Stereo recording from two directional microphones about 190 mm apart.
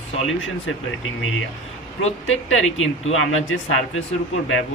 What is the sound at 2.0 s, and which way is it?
Speech, 90° left.